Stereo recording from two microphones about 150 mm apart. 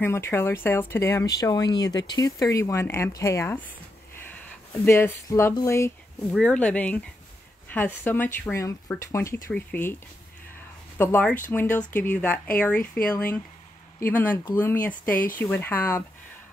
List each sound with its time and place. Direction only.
0.0 s speech: 15° left (ahead or behind)
6.3 s speech: 5° left (ahead or behind)
11.0 s speech: 10° left (ahead or behind)